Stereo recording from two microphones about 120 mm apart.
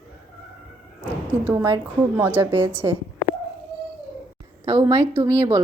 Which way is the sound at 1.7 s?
20° right (ahead or behind).